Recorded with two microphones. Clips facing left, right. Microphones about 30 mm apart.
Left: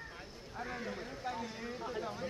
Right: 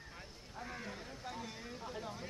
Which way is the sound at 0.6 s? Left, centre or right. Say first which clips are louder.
Left 5 dB; left.